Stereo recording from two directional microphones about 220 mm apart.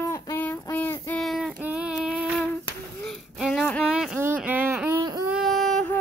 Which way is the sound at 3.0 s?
Centre (ahead or behind).